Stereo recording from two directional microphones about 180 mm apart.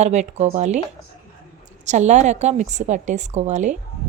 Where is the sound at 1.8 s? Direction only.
40° right (ahead or behind).